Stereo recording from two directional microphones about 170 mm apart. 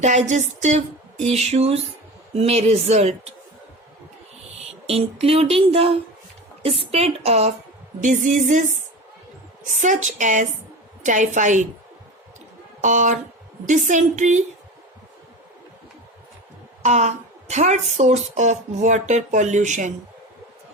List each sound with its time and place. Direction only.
0.0 s a sound: 45° right (ahead or behind)
4.9 s a sound: 35° right (ahead or behind)
8.0 s a woman's voice: 50° right (ahead or behind)
9.7 s a woman's voice: 45° right (ahead or behind)
12.8 s a woman's voice: 45° right (ahead or behind)
16.8 s a woman's voice: 40° right (ahead or behind)